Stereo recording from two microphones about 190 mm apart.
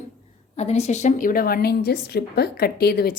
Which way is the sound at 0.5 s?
35° left (ahead or behind).